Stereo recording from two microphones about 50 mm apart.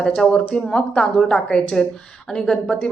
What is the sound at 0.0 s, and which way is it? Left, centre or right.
Speech, centre.